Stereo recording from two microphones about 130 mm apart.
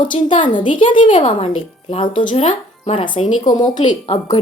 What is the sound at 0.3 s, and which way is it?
A woman's voice, 40° left (ahead or behind).